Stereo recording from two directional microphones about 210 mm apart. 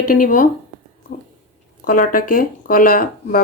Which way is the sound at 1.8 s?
40° left (ahead or behind).